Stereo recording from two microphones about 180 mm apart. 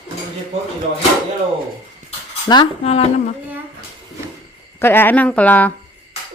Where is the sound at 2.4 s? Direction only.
25° left (ahead or behind).